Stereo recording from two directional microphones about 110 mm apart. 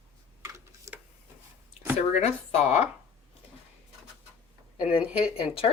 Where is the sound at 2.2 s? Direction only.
80° left.